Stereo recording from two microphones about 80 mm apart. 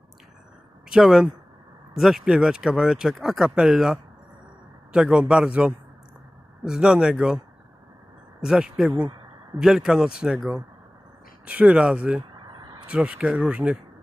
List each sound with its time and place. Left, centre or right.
0.9 s speech: centre
8.4 s speech: centre
11.4 s speech: centre